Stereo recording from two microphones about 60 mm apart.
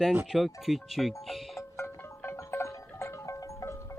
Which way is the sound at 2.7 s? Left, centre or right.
Left.